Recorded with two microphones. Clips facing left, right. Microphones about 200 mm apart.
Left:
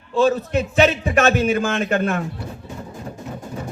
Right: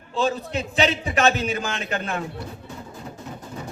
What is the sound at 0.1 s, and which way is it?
Speech, 50° left (ahead or behind).